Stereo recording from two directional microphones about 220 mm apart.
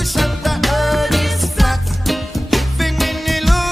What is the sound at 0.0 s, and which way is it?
Music, centre (ahead or behind).